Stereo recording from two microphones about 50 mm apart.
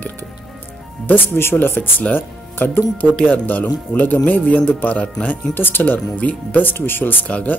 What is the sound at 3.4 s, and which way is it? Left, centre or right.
Speech, left.